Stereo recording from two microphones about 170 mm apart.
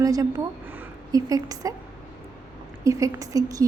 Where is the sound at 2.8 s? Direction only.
20° right (ahead or behind).